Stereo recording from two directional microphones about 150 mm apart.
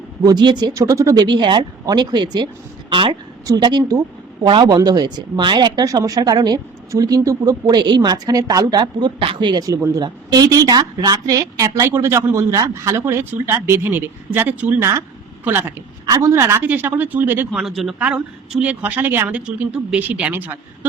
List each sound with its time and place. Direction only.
0.3 s speech: 30° right (ahead or behind); by 17.6 s 15° right (ahead or behind)
17.6 s speech: centre (ahead or behind)